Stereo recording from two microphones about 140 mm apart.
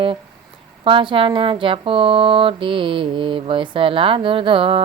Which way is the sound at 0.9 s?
35° right (ahead or behind).